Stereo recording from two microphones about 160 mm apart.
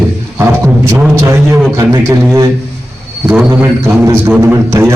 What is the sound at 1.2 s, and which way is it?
Speech, 20° right (ahead or behind).